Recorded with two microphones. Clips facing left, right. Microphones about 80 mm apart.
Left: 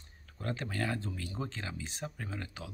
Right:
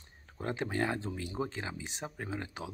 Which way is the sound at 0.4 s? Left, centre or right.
Centre.